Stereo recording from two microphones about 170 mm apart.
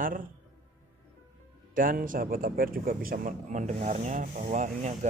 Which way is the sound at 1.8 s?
55° right (ahead or behind).